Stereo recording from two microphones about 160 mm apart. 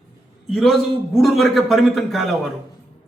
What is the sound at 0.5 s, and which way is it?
A man's voice, centre (ahead or behind).